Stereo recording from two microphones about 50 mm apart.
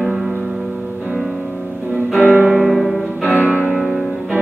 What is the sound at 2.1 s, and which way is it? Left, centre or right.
Music, right.